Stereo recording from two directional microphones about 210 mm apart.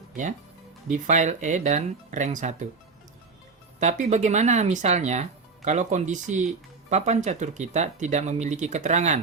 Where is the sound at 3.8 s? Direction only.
35° right (ahead or behind).